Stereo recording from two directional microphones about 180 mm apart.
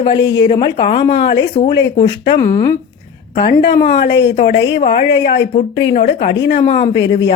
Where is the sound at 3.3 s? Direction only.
55° left (ahead or behind).